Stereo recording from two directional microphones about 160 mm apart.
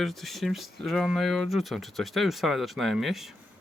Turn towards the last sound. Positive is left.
turn(degrees=0)  # may be behind; listen again after turning